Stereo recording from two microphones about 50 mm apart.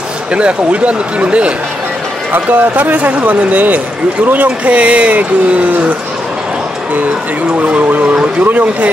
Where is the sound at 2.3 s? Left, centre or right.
Right.